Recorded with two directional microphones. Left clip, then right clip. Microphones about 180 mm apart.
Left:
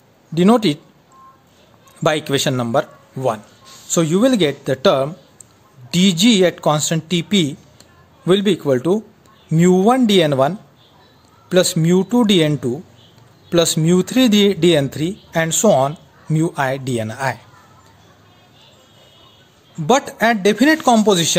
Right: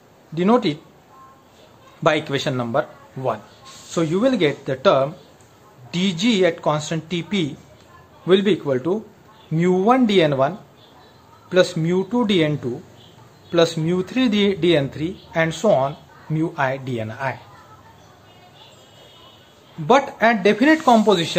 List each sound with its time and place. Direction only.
0.3 s speech: 45° left (ahead or behind)
2.0 s speech: 45° left (ahead or behind)
19.9 s speech: 50° left (ahead or behind)